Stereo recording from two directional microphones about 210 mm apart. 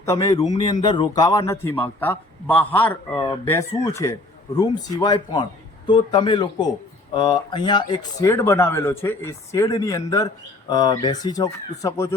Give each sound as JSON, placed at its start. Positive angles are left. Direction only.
{"t": 0.0, "sound": "a man's voice", "side_deg": 15}